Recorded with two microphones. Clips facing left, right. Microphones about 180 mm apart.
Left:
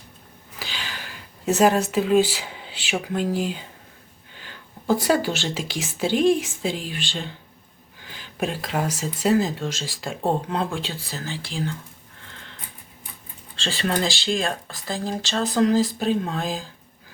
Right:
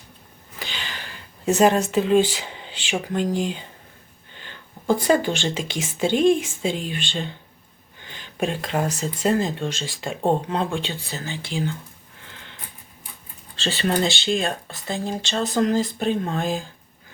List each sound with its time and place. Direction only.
0.6 s speech: 5° left (ahead or behind)
12.2 s a sound: centre (ahead or behind)
13.6 s speech: centre (ahead or behind)